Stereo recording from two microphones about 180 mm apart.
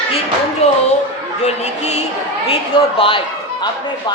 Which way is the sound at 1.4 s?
40° left (ahead or behind).